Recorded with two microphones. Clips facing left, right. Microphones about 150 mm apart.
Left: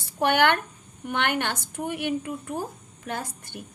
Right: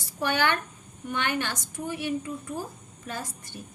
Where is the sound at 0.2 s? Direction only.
60° left (ahead or behind).